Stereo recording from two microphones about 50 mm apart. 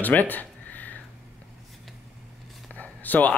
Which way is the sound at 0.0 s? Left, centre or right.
Left.